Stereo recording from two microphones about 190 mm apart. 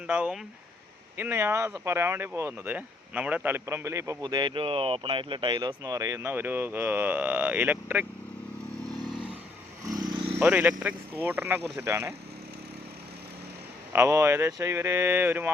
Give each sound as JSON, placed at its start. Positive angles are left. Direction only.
{"t": 0.1, "sound": "speech", "side_deg": -5}
{"t": 9.8, "sound": "vehicle", "side_deg": -20}
{"t": 10.4, "sound": "speech", "side_deg": -5}
{"t": 13.9, "sound": "speech", "side_deg": -15}